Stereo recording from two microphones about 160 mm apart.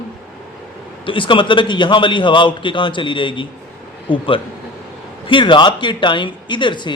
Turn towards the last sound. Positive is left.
turn(degrees=30)  # may be behind; listen again after turning